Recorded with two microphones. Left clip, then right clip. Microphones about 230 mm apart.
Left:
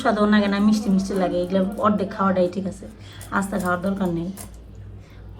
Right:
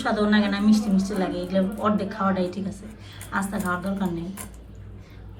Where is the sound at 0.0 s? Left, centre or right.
Centre.